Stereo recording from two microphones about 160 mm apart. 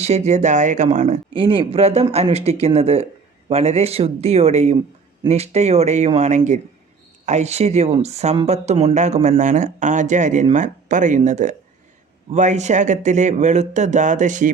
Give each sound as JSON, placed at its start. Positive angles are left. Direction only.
{"t": 0.0, "sound": "speech", "side_deg": -45}
{"t": 1.3, "sound": "speech", "side_deg": -30}